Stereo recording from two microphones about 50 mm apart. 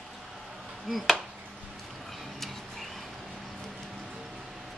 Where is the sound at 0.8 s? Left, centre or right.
Centre.